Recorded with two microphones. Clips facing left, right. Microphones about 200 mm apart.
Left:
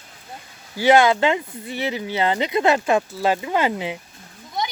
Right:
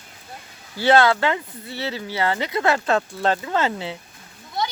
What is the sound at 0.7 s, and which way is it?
Speech, 15° left (ahead or behind).